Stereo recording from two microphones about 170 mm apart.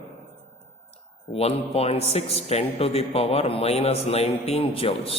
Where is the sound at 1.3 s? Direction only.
35° left (ahead or behind).